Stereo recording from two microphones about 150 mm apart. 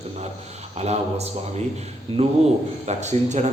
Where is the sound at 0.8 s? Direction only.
45° right (ahead or behind).